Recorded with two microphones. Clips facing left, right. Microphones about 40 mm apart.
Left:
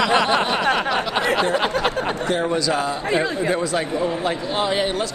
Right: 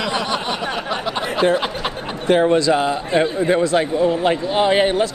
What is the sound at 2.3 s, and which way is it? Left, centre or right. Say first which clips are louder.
Speech: right 10 dB; right.